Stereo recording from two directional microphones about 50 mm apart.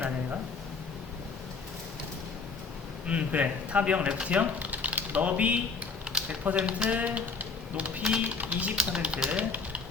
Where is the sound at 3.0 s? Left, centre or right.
Right.